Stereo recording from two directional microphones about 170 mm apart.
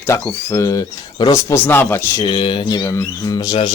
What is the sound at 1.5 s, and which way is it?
Speech, 15° left (ahead or behind).